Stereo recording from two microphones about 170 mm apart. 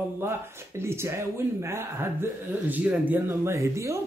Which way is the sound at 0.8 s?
15° right (ahead or behind).